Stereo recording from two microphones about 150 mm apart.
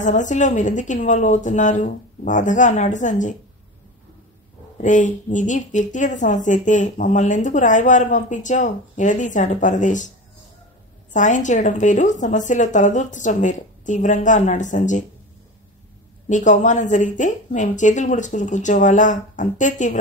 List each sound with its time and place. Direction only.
0.0 s speech: 55° left (ahead or behind)
4.8 s speech: 55° left (ahead or behind)
11.1 s speech: 55° left (ahead or behind)
16.3 s speech: 55° left (ahead or behind)